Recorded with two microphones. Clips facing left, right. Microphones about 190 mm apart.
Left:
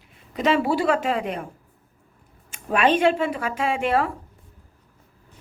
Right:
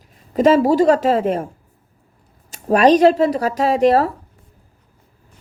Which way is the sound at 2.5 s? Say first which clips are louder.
Right 8 dB; 40° right (ahead or behind).